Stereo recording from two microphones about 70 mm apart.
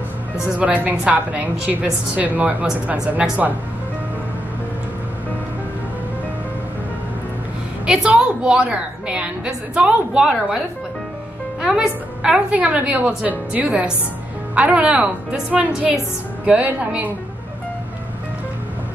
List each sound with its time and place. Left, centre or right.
0.6 s a woman's voice: right
7.8 s a woman's voice: centre
11.6 s a woman's voice: centre